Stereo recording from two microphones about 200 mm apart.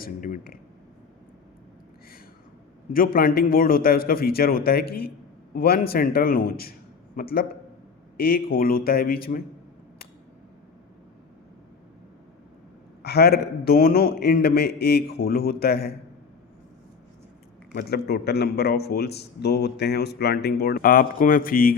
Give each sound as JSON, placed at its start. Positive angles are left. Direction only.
{"t": 0.0, "sound": "a man's voice", "side_deg": 45}
{"t": 2.9, "sound": "a man's voice", "side_deg": 45}
{"t": 13.0, "sound": "a man's voice", "side_deg": 55}
{"t": 17.7, "sound": "a man's voice", "side_deg": 50}